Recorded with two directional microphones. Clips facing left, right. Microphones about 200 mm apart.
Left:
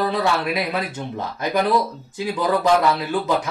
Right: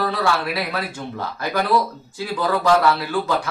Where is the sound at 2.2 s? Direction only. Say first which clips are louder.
Left 1 dB; 20° left (ahead or behind).